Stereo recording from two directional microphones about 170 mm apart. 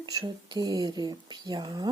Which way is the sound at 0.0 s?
25° right (ahead or behind).